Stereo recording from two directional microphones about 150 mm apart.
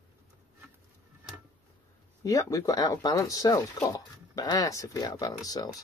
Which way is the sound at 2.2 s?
20° left (ahead or behind).